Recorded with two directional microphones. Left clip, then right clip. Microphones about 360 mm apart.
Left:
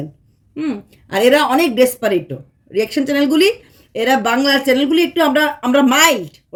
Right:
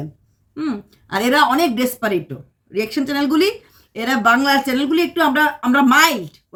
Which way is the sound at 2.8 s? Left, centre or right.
Right.